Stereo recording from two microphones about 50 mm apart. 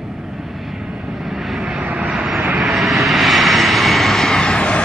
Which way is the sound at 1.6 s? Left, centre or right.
Centre.